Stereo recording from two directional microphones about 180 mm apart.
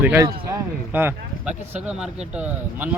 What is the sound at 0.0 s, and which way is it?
Speech, 10° right (ahead or behind).